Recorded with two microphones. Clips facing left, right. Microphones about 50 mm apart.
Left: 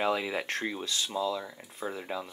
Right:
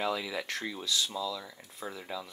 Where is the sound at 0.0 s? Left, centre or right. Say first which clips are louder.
Left 4 dB; left.